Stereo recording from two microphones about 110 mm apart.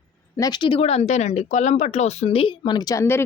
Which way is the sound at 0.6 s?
55° left (ahead or behind).